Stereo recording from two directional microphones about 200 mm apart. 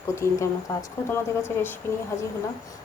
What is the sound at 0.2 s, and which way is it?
Speech, 15° left (ahead or behind).